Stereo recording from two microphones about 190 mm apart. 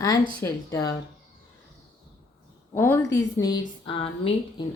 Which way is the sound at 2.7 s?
10° left (ahead or behind).